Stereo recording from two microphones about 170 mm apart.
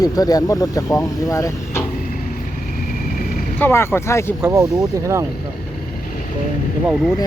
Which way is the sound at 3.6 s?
15° left (ahead or behind).